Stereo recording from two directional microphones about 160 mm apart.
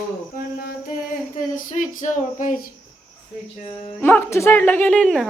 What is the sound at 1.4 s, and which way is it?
Speech, 55° left (ahead or behind).